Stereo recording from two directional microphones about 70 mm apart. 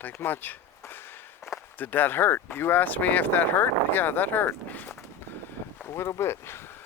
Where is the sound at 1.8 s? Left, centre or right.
Left.